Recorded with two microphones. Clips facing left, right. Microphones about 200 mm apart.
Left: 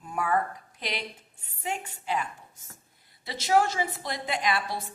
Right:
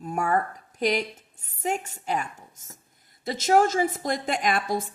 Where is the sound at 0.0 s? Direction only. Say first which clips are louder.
Right 2 dB; 45° right (ahead or behind).